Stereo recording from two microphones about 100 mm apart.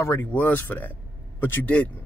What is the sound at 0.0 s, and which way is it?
Speech, 30° left (ahead or behind).